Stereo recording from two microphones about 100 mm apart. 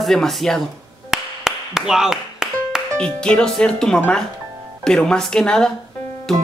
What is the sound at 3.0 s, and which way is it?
Speech, 10° left (ahead or behind).